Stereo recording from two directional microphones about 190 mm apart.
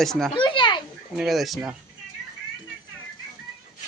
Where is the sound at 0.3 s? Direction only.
25° left (ahead or behind).